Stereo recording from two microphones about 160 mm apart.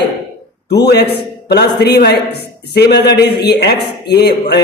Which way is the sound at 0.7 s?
90° left.